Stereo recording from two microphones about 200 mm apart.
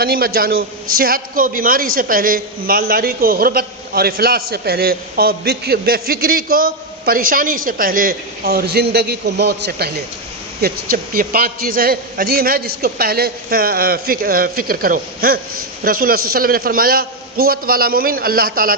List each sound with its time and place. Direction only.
0.0 s a woman's voice: 50° right (ahead or behind)